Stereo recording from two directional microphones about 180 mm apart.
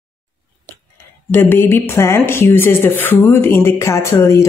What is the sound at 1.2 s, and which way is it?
Speech, 10° left (ahead or behind).